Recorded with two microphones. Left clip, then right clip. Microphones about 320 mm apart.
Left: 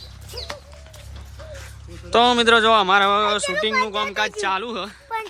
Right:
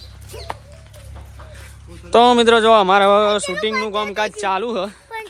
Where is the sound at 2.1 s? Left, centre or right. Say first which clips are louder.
Right 4 dB; centre.